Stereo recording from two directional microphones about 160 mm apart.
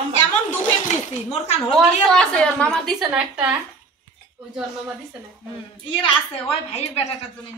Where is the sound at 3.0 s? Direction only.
5° right (ahead or behind).